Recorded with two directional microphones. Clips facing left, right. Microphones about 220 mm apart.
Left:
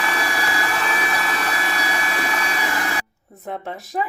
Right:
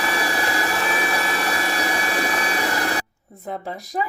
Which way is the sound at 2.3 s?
35° right (ahead or behind).